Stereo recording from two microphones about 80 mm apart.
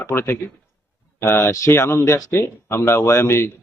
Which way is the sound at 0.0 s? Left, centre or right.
Left.